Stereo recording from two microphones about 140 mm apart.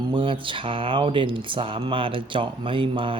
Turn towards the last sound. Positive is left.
turn(degrees=-40)  # may be behind; listen again after turning